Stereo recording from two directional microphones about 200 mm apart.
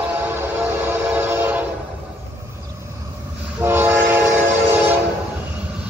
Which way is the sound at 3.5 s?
10° right (ahead or behind).